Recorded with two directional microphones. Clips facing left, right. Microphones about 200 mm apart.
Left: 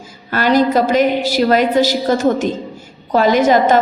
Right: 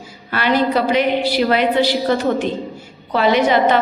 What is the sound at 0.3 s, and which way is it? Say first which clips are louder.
A woman's voice: left 4 dB; 40° left (ahead or behind).